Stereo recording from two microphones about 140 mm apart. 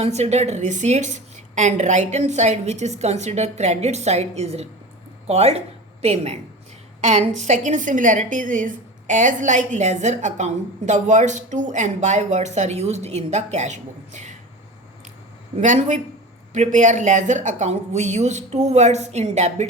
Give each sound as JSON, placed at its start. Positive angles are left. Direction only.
{"t": 0.0, "sound": "a woman's voice", "side_deg": -50}
{"t": 15.6, "sound": "a woman's voice", "side_deg": -60}